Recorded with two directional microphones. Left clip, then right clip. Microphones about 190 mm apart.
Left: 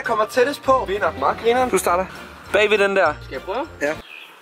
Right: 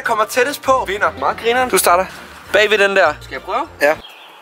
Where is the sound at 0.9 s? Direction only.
Centre (ahead or behind).